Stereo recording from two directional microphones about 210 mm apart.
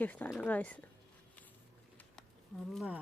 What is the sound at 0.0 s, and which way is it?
Speech, 10° left (ahead or behind).